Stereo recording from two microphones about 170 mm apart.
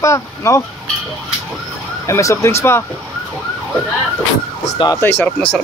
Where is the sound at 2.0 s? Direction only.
20° left (ahead or behind).